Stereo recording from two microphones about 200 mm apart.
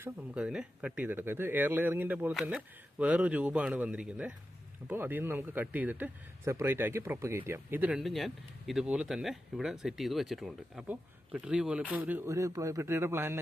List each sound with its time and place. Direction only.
0.0 s a man's voice: 5° right (ahead or behind)